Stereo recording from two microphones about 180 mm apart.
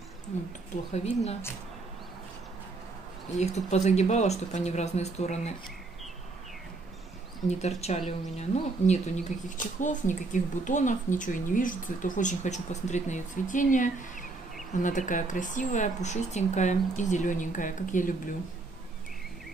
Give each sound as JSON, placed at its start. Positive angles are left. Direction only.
{"t": 0.9, "sound": "speech", "side_deg": 35}
{"t": 3.3, "sound": "speech", "side_deg": 40}
{"t": 7.4, "sound": "speech", "side_deg": 40}